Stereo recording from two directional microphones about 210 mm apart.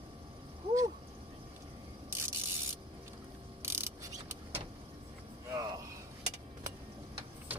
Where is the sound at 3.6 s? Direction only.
10° right (ahead or behind).